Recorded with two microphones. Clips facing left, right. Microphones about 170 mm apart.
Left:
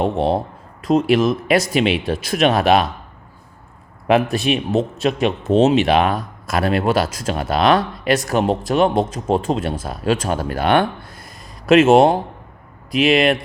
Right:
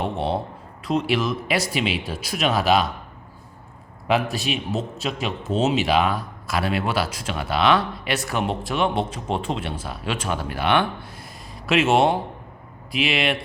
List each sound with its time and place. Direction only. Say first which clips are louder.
0.0 s a man's voice: left 6 dB; 40° left (ahead or behind); by 2.8 s 60° left (ahead or behind)
4.1 s a man's voice: left 6 dB; 55° left (ahead or behind)